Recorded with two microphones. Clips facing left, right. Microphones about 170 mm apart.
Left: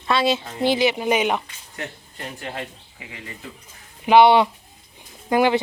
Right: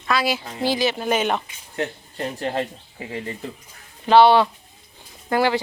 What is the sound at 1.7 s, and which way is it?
Speech, 35° right (ahead or behind).